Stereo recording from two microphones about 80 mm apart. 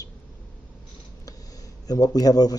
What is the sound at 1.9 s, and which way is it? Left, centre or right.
Speech, left.